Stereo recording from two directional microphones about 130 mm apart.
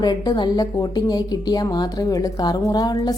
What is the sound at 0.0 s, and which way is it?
A woman's voice, 30° left (ahead or behind).